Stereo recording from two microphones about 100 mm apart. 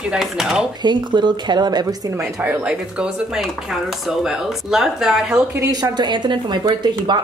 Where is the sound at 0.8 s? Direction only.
50° right (ahead or behind).